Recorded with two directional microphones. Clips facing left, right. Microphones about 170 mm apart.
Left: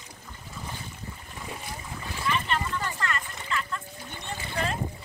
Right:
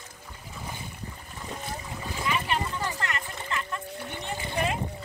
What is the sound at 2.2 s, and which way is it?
Boat, 10° right (ahead or behind).